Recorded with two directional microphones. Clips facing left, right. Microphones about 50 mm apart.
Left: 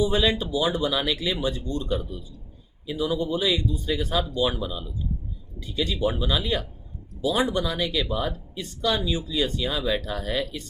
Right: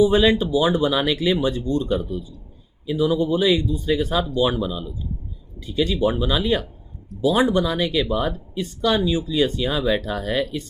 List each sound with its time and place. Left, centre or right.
0.0 s speech: right